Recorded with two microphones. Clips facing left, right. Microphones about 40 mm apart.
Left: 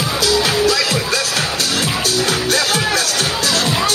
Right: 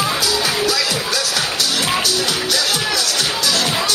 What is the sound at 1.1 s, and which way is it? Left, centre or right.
Music, left.